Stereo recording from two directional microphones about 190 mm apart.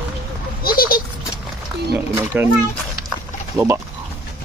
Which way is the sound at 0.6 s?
50° left (ahead or behind).